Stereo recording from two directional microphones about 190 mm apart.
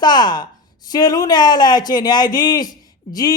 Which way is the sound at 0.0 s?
20° left (ahead or behind).